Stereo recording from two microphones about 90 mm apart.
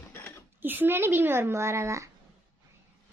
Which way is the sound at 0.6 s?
20° right (ahead or behind).